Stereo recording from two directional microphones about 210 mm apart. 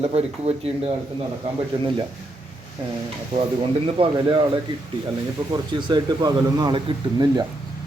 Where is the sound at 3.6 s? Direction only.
25° right (ahead or behind).